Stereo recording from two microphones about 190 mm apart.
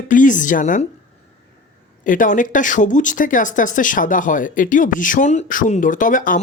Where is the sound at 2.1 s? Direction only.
45° left (ahead or behind).